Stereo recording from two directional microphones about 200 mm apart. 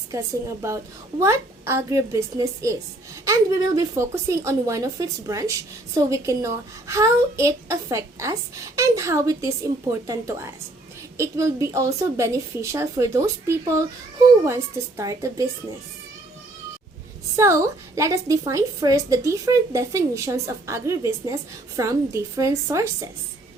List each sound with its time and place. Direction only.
0.1 s a woman's voice: 15° right (ahead or behind)
17.3 s a woman's voice: 15° right (ahead or behind)